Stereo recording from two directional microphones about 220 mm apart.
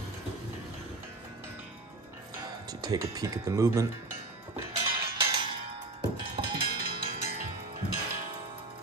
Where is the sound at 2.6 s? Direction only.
15° right (ahead or behind).